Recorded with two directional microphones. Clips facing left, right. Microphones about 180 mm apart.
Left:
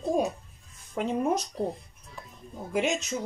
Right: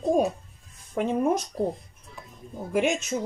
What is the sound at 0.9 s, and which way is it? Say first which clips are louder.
Speech: right 3 dB; 50° right (ahead or behind).